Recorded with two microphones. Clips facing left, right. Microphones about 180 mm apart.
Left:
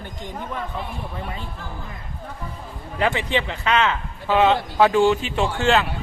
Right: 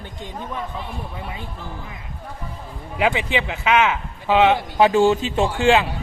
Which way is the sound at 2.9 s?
10° right (ahead or behind).